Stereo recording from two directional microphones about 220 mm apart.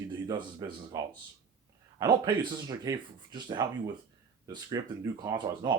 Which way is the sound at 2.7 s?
20° right (ahead or behind).